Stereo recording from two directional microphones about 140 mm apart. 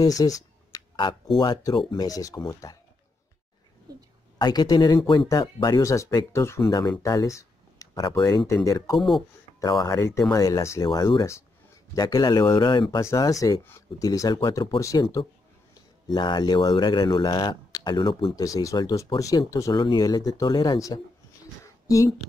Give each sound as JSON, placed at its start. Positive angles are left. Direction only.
{"t": 0.0, "sound": "a sound", "side_deg": 25}
{"t": 1.4, "sound": "speech", "side_deg": 30}
{"t": 4.4, "sound": "speech", "side_deg": 30}
{"t": 8.9, "sound": "speech", "side_deg": 0}
{"t": 9.8, "sound": "speech", "side_deg": 20}
{"t": 10.9, "sound": "speech", "side_deg": 35}
{"t": 14.8, "sound": "speech", "side_deg": 20}
{"t": 18.3, "sound": "speech", "side_deg": 25}